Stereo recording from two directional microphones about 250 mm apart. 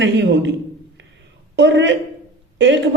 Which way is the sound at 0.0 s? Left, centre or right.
Right.